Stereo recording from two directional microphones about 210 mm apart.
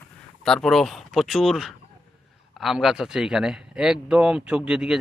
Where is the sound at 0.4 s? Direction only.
Centre (ahead or behind).